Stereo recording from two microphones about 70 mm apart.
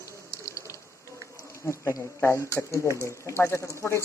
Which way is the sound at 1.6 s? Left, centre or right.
Left.